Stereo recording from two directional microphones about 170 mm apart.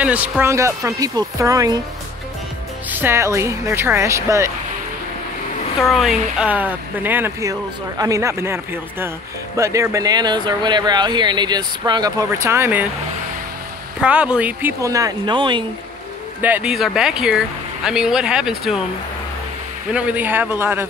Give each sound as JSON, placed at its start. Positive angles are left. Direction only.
{"t": 0.0, "sound": "speech", "side_deg": -10}
{"t": 2.9, "sound": "speech", "side_deg": -10}
{"t": 5.8, "sound": "speech", "side_deg": 0}
{"t": 9.6, "sound": "speech", "side_deg": -20}
{"t": 14.0, "sound": "speech", "side_deg": -5}
{"t": 16.3, "sound": "speech", "side_deg": -10}
{"t": 19.9, "sound": "speech", "side_deg": -10}